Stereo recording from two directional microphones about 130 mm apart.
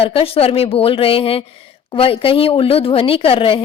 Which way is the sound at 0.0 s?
45° left (ahead or behind).